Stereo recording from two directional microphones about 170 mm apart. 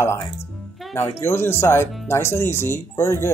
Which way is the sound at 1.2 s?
15° left (ahead or behind).